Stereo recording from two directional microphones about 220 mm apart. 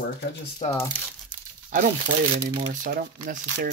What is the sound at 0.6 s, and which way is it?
Speech, 30° left (ahead or behind).